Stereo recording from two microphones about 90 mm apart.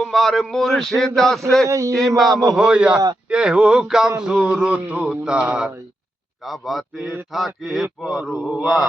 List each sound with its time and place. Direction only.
0.0 s a man's voice: 5° left (ahead or behind)
1.6 s a man's voice: 35° right (ahead or behind)
2.1 s a man's voice: centre (ahead or behind)